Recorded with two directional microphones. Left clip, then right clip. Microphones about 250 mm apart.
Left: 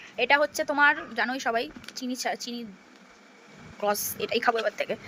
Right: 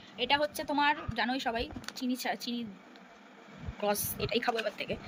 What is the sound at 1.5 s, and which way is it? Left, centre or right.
Speech, left.